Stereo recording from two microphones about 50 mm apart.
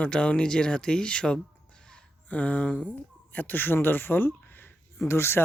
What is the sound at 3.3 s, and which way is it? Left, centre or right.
Speech, left.